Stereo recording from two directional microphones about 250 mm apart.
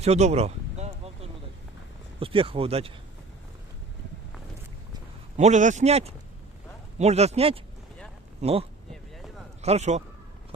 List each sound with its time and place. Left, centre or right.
0.0 s a sound: right
2.1 s speech: right
5.4 s speech: right